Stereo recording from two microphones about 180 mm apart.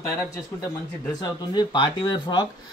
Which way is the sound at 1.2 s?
25° left (ahead or behind).